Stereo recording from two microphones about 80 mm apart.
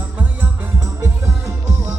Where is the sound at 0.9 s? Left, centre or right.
Right.